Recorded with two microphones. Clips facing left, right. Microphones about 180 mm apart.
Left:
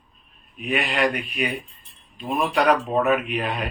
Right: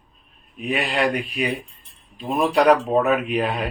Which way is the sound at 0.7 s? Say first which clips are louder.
Right 1 dB; 35° right (ahead or behind).